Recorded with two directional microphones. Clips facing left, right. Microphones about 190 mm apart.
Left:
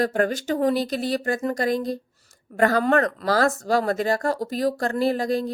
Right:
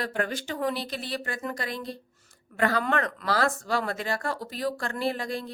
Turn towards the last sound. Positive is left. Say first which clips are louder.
# left 8 dB
turn(degrees=40)  # may be behind; listen again after turning